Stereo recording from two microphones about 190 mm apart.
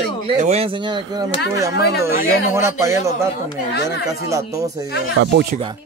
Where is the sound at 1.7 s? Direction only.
60° left (ahead or behind).